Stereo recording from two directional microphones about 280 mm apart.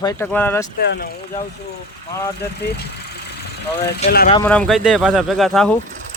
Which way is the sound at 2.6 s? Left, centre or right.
Left.